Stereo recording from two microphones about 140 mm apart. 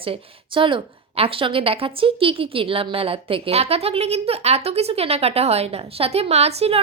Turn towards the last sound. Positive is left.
turn(degrees=-45)  # may be behind; listen again after turning